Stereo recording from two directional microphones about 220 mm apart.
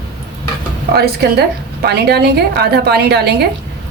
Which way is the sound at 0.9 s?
45° right (ahead or behind).